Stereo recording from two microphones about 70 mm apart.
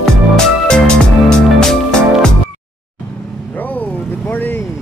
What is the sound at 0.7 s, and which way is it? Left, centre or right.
Music, centre.